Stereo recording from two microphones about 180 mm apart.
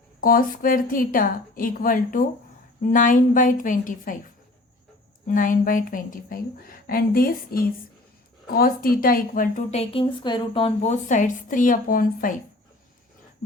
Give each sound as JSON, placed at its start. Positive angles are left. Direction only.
{"t": 0.2, "sound": "a woman's voice", "side_deg": 50}
{"t": 5.3, "sound": "a woman's voice", "side_deg": 45}
{"t": 9.7, "sound": "a woman's voice", "side_deg": 30}